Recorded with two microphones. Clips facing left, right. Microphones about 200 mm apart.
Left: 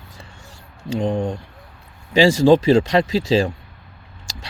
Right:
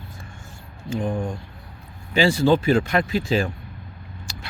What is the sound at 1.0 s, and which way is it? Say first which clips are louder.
Speech: left 5 dB; 25° left (ahead or behind).